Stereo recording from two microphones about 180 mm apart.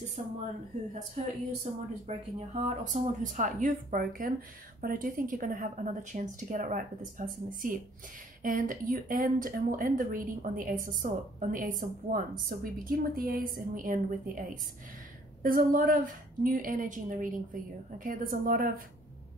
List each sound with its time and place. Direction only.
0.2 s speech: 35° right (ahead or behind)
8.4 s speech: 50° right (ahead or behind)